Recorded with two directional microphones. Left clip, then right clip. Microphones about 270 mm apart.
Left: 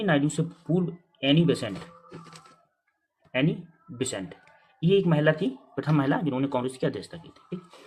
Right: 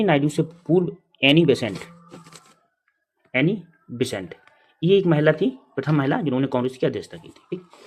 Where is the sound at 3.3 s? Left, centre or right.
Right.